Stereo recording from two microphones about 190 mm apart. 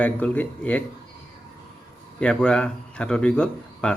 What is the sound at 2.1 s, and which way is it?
Speech, 5° left (ahead or behind).